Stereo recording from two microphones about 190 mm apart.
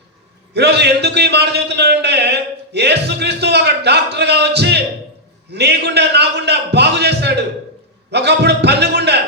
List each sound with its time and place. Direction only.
0.5 s a man's voice: 60° right (ahead or behind)